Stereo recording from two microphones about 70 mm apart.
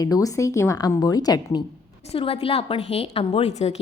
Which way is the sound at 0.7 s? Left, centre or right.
Left.